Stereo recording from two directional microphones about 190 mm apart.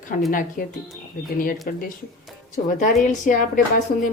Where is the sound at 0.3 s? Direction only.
45° left (ahead or behind).